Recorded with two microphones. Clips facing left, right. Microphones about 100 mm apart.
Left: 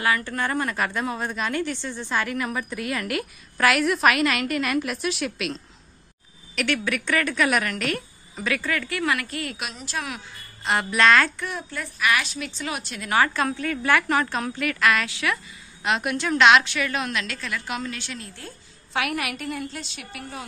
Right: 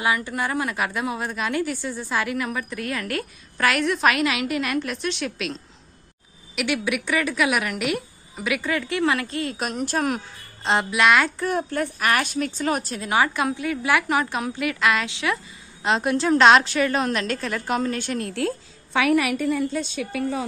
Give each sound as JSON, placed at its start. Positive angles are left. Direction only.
{"t": 0.0, "sound": "a woman's voice", "side_deg": -15}
{"t": 6.5, "sound": "speech", "side_deg": -10}
{"t": 9.6, "sound": "a woman's voice", "side_deg": -50}
{"t": 10.6, "sound": "speech", "side_deg": -25}
{"t": 10.9, "sound": "speech", "side_deg": -15}
{"t": 11.3, "sound": "a woman's voice", "side_deg": -45}
{"t": 13.1, "sound": "a woman's voice", "side_deg": -15}